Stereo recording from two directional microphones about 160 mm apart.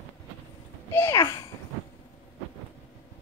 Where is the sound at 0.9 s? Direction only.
15° left (ahead or behind).